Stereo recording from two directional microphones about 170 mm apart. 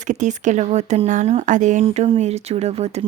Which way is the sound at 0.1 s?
45° right (ahead or behind).